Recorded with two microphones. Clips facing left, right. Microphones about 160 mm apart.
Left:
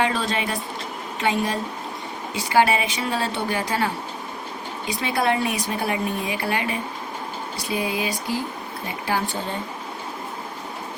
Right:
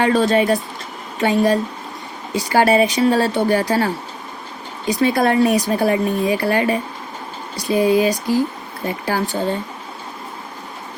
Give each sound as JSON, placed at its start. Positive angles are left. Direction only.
{"t": 0.0, "sound": "speech", "side_deg": -40}